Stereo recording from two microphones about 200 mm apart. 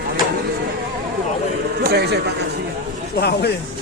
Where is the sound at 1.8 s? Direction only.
55° right (ahead or behind).